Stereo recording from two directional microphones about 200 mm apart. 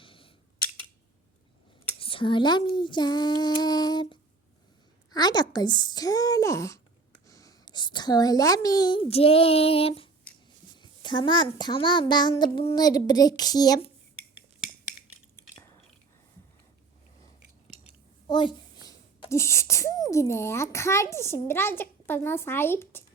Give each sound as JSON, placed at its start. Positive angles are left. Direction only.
{"t": 0.0, "sound": "scissors", "side_deg": 25}
{"t": 2.0, "sound": "a child's voice", "side_deg": 25}
{"t": 18.3, "sound": "speech", "side_deg": 25}